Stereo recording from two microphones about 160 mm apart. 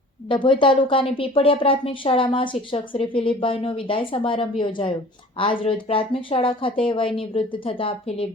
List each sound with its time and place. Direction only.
0.3 s a woman's voice: 30° left (ahead or behind)